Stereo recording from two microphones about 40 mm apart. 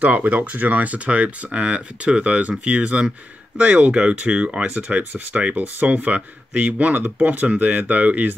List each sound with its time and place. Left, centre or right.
0.0 s speech: right
4.6 s speech: right